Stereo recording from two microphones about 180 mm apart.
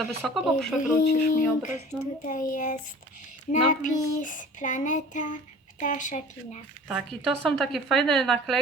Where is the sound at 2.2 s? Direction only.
50° left (ahead or behind).